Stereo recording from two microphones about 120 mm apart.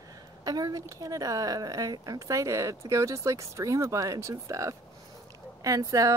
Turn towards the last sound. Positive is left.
turn(degrees=-30)  # may be behind; listen again after turning